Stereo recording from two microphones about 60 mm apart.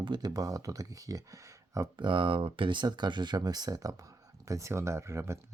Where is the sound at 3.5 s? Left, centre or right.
Right.